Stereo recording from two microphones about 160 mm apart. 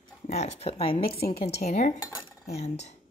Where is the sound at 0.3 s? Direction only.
40° left (ahead or behind).